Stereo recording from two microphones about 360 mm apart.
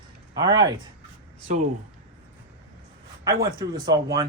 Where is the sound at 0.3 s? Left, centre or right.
Centre.